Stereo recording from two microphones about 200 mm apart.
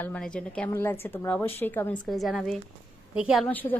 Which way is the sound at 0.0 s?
5° left (ahead or behind).